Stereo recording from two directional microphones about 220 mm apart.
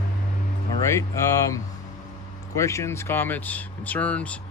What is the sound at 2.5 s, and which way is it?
Speech, 15° left (ahead or behind).